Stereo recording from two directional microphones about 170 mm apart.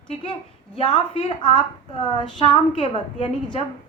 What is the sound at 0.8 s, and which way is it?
A woman's voice, 30° left (ahead or behind).